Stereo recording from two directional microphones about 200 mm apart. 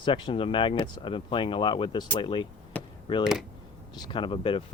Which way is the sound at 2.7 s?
5° left (ahead or behind).